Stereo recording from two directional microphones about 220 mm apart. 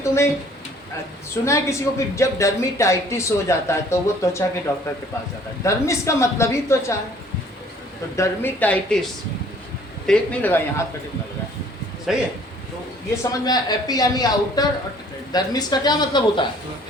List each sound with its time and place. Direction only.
0.0 s speech: 15° left (ahead or behind)
1.5 s speech: 15° left (ahead or behind)
5.6 s speech: 15° left (ahead or behind)
8.1 s speech: 10° left (ahead or behind)
10.1 s speech: 10° left (ahead or behind)
12.1 s a man's voice: centre (ahead or behind)
13.3 s speech: 20° left (ahead or behind)